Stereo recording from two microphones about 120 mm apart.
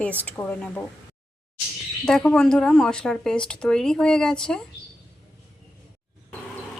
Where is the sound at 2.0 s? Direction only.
5° left (ahead or behind).